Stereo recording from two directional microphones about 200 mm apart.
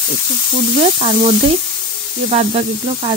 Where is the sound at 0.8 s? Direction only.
30° right (ahead or behind).